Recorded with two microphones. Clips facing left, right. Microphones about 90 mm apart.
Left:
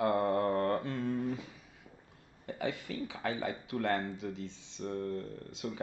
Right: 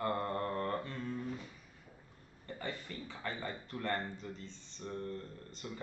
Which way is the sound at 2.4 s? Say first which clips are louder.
Left 6 dB; 80° left.